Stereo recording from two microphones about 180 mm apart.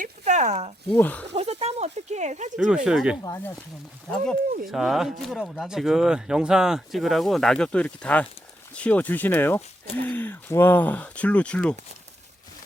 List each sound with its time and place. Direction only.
0.0 s a sound: 40° right (ahead or behind)
0.9 s speech: 10° left (ahead or behind)
1.3 s a sound: 35° right (ahead or behind)
2.6 s speech: 5° right (ahead or behind)
3.2 s speech: 15° left (ahead or behind)
4.7 s speech: centre (ahead or behind)